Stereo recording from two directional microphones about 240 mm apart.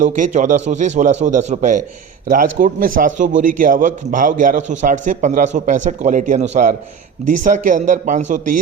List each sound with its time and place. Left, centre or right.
0.0 s a man's voice: right